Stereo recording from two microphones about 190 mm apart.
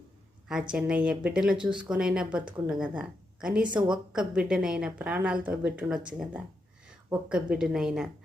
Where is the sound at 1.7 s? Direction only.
25° right (ahead or behind).